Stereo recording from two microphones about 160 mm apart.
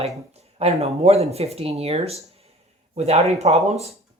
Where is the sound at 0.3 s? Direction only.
40° right (ahead or behind).